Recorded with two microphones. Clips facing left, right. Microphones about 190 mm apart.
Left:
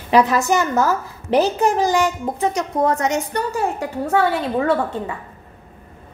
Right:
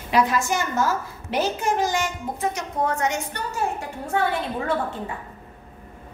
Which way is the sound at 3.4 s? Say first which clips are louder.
Left 5 dB; 70° left (ahead or behind).